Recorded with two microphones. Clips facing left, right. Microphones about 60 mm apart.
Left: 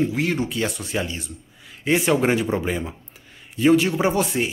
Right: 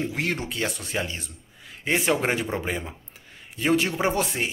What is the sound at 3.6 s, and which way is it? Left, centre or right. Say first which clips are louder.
Speech: left 5 dB; right.